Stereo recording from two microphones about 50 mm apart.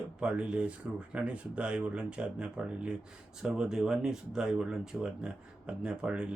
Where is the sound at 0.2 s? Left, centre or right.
Right.